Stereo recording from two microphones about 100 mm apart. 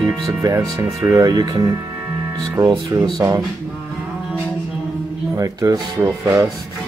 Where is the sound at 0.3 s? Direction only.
30° right (ahead or behind).